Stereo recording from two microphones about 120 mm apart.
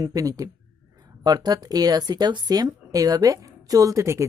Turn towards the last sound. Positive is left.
turn(degrees=-25)  # may be behind; listen again after turning